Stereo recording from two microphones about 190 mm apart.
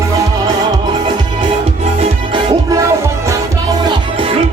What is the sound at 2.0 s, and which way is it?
Music, 20° right (ahead or behind).